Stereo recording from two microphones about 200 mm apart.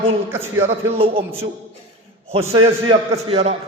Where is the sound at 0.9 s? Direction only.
25° right (ahead or behind).